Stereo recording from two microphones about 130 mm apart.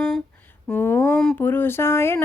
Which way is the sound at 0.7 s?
15° left (ahead or behind).